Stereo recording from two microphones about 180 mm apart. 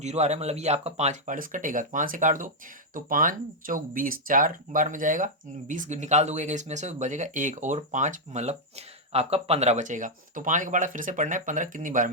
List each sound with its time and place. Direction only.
0.0 s speech: 40° right (ahead or behind)